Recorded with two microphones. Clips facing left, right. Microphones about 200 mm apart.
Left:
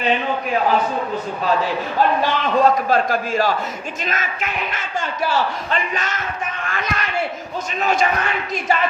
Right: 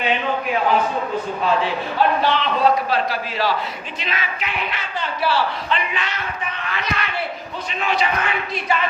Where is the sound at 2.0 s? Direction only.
45° left (ahead or behind).